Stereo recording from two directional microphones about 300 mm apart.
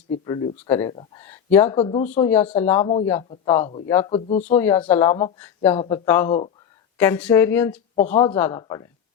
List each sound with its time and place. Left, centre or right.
0.3 s speech: centre
1.7 s speech: centre
2.3 s speech: centre; by 4.5 s left
4.5 s speech: centre